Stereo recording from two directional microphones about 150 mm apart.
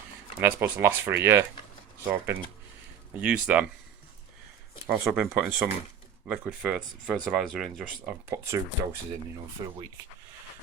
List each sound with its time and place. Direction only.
0.3 s speech: 15° right (ahead or behind)
4.9 s speech: 10° right (ahead or behind)
8.3 s speech: 20° right (ahead or behind)